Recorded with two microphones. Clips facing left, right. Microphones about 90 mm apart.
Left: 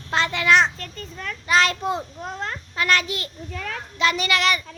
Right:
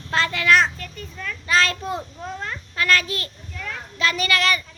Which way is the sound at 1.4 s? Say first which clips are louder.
Left 2 dB; 20° left (ahead or behind).